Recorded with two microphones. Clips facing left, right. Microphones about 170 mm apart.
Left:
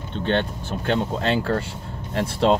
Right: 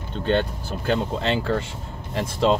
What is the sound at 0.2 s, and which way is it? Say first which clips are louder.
Speech: right 1 dB; 5° right (ahead or behind).